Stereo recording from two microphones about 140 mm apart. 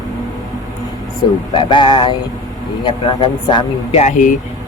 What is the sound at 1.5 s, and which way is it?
A man's voice, 35° left (ahead or behind).